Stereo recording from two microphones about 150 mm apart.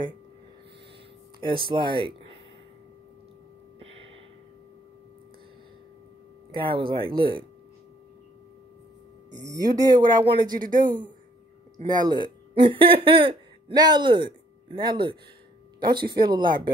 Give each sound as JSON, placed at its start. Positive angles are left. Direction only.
{"t": 1.4, "sound": "speech", "side_deg": -35}
{"t": 3.8, "sound": "a sound", "side_deg": -40}
{"t": 6.5, "sound": "speech", "side_deg": -35}
{"t": 9.3, "sound": "speech", "side_deg": -25}